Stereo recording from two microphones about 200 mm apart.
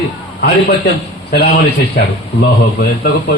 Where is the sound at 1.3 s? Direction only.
50° left (ahead or behind).